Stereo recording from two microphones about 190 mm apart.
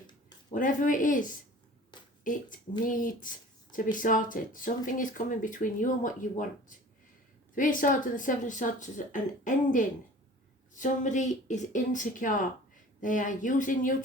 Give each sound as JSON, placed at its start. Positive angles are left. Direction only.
{"t": 0.5, "sound": "speech", "side_deg": 45}
{"t": 2.2, "sound": "speech", "side_deg": 45}